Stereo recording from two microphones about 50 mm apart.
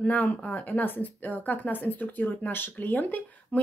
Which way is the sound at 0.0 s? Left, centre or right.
Left.